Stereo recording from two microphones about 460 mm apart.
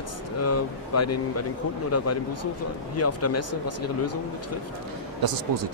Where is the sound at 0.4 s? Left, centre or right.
Left.